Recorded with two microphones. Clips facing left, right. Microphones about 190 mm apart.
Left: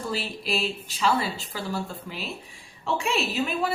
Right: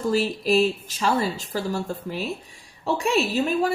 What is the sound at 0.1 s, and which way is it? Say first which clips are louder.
A woman's voice: right 10 dB; 45° right (ahead or behind).